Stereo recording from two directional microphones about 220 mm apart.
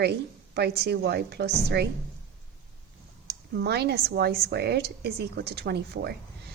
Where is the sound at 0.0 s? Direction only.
50° right (ahead or behind).